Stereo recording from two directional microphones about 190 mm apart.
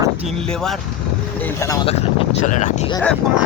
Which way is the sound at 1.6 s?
15° left (ahead or behind).